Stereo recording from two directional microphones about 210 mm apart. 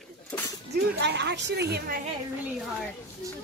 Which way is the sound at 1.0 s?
55° right (ahead or behind).